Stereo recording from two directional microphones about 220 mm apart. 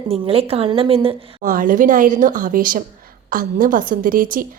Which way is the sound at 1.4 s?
40° right (ahead or behind).